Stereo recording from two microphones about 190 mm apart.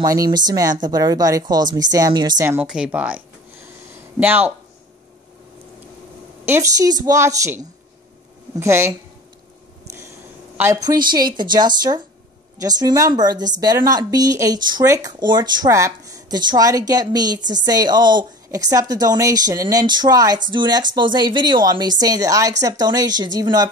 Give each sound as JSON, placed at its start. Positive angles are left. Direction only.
{"t": 0.0, "sound": "speech", "side_deg": -20}
{"t": 2.6, "sound": "a woman's voice", "side_deg": -5}
{"t": 6.4, "sound": "a woman's voice", "side_deg": -15}
{"t": 10.6, "sound": "speech", "side_deg": -15}